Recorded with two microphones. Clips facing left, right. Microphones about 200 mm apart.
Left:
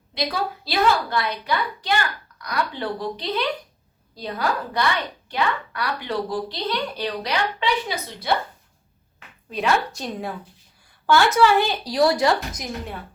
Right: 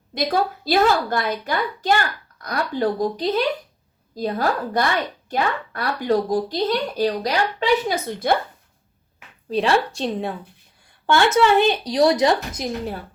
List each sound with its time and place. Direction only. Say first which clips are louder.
0.1 s a woman's voice: right 5 dB; 45° right (ahead or behind)
9.5 s speech: right 3 dB; 30° right (ahead or behind)